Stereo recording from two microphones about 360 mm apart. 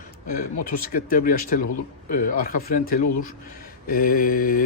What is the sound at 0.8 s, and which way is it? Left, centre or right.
Speech, left.